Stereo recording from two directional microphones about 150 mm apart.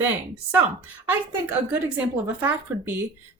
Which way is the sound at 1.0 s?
10° right (ahead or behind).